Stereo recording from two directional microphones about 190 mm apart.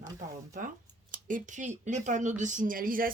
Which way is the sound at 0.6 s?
45° right (ahead or behind).